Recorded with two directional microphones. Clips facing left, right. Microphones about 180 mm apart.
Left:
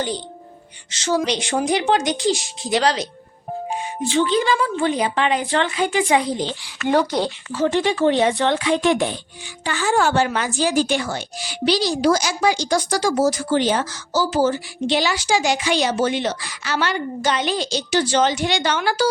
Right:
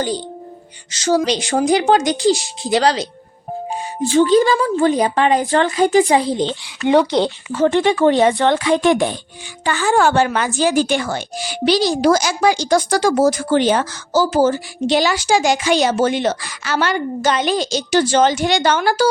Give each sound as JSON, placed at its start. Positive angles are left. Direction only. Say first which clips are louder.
{"t": 1.0, "sound": "a woman's voice", "louder": "right 4 dB", "side_deg": -35}
{"t": 4.1, "sound": "speech", "louder": "right 6 dB", "side_deg": -40}
{"t": 7.5, "sound": "speech", "louder": "right 4 dB", "side_deg": -55}